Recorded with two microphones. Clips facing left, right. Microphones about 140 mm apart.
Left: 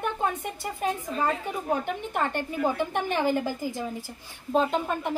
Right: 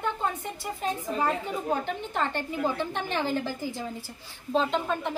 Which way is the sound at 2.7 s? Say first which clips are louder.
Left 3 dB; 15° left (ahead or behind).